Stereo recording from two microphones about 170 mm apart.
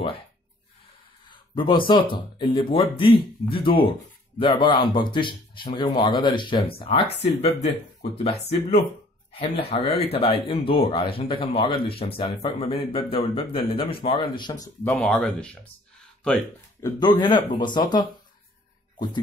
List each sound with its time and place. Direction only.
1.3 s speech: 30° left (ahead or behind)
15.0 s speech: 5° left (ahead or behind)
16.8 s speech: 25° left (ahead or behind)